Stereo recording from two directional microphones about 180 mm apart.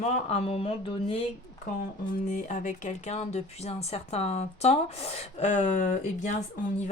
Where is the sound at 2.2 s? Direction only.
45° left (ahead or behind).